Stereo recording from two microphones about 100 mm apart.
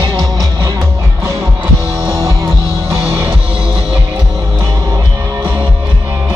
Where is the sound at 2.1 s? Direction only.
35° right (ahead or behind).